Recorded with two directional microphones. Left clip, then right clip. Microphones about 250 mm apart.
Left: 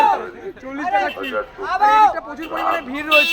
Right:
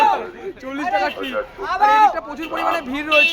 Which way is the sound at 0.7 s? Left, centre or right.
Centre.